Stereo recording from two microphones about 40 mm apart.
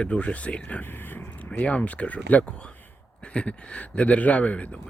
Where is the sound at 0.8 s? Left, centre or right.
Left.